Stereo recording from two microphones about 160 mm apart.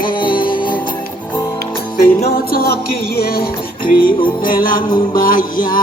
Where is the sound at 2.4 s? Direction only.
70° left (ahead or behind).